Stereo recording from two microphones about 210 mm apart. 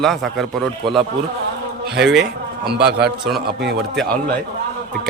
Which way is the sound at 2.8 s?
50° right (ahead or behind).